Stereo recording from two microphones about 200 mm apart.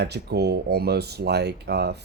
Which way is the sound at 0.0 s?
55° right (ahead or behind).